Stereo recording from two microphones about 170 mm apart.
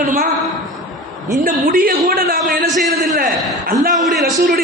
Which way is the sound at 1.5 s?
60° right (ahead or behind).